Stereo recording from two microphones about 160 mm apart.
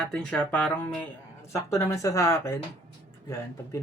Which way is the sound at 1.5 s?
20° left (ahead or behind).